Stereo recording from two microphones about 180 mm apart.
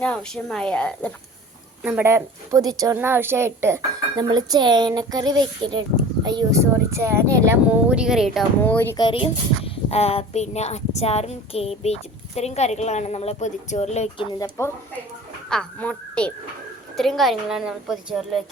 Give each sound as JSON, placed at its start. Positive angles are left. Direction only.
{"t": 0.0, "sound": "a woman's voice", "side_deg": 5}
{"t": 1.8, "sound": "a woman's voice", "side_deg": -10}
{"t": 8.6, "sound": "speech", "side_deg": 10}
{"t": 9.0, "sound": "speech", "side_deg": 30}
{"t": 15.4, "sound": "a woman's voice", "side_deg": 5}